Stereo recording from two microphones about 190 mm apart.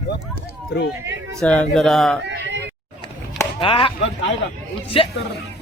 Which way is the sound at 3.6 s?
25° left (ahead or behind).